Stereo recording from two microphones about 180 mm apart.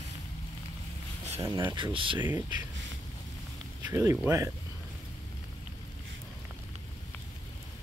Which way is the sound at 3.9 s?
15° right (ahead or behind).